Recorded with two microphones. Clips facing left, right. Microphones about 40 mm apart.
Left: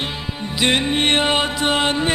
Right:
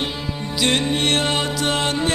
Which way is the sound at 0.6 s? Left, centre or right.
Left.